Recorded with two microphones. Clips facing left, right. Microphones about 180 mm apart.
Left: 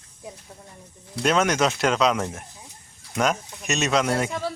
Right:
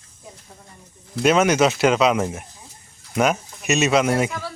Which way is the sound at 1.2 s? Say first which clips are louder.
Right 4 dB; 5° right (ahead or behind).